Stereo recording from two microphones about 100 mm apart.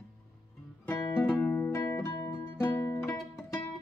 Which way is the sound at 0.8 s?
15° left (ahead or behind).